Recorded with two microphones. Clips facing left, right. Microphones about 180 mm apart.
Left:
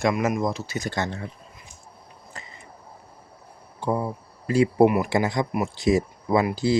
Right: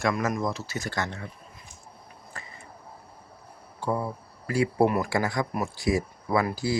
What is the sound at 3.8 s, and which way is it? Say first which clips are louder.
Speech: left 3 dB; 15° left (ahead or behind).